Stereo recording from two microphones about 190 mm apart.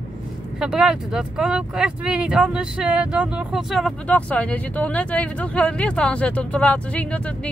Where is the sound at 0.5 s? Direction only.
5° right (ahead or behind).